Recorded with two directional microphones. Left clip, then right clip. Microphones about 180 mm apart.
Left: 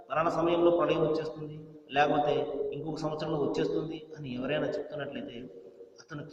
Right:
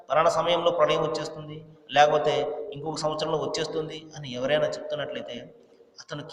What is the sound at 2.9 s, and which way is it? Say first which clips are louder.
A man's voice: right 6 dB; 40° right (ahead or behind).